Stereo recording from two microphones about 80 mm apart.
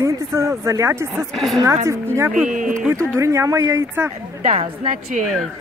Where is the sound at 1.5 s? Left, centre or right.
Right.